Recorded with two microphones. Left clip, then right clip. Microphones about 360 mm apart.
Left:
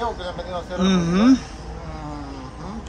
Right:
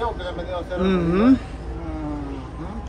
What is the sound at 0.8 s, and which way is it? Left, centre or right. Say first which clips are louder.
Speech: even; centre.